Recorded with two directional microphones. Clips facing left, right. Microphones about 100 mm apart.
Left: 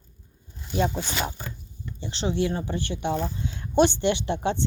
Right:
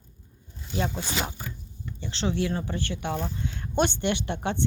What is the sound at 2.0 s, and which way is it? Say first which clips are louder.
A woman's voice: left 2 dB; 20° left (ahead or behind).